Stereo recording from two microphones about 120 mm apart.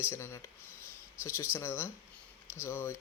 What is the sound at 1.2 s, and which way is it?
Speech, 20° left (ahead or behind).